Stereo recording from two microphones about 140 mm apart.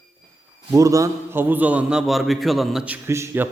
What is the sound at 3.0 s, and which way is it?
Speech, 20° right (ahead or behind).